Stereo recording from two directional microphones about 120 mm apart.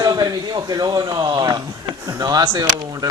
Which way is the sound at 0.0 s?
35° right (ahead or behind).